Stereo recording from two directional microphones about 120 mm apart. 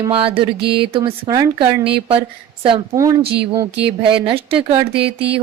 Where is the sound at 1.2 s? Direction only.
30° right (ahead or behind).